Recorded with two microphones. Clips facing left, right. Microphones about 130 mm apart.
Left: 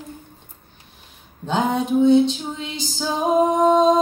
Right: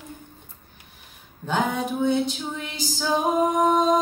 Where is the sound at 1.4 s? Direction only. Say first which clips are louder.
Left 3 dB; 20° left (ahead or behind).